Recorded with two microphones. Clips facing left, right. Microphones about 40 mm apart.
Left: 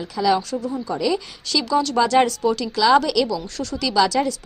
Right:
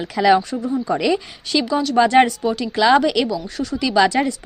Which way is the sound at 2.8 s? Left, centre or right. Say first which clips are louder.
Right 2 dB; right.